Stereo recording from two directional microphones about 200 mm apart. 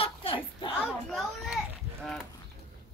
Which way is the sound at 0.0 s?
25° left (ahead or behind).